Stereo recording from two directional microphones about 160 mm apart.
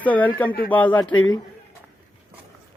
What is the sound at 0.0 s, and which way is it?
Speech, 10° left (ahead or behind).